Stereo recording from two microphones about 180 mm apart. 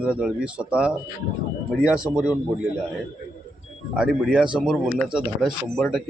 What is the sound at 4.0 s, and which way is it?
Speech, 5° right (ahead or behind).